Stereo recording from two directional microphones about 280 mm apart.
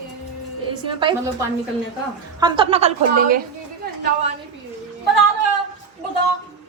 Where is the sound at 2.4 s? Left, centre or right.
Centre.